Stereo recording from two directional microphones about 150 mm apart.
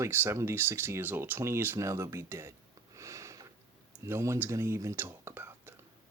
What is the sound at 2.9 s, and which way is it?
Sniff, 20° right (ahead or behind).